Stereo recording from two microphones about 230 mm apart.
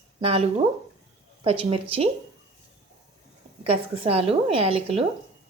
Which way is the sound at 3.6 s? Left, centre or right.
Right.